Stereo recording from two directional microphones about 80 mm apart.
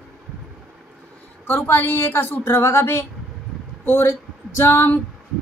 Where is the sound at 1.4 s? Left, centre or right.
Left.